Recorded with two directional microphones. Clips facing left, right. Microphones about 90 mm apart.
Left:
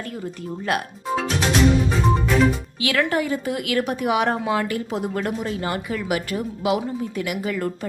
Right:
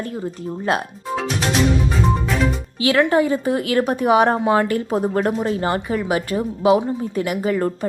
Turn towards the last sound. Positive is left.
turn(degrees=-35)  # may be behind; listen again after turning